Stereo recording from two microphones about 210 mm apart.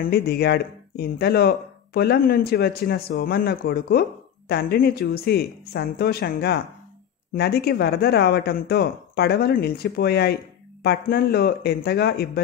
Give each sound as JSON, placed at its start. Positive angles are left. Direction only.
{"t": 0.0, "sound": "speech", "side_deg": 45}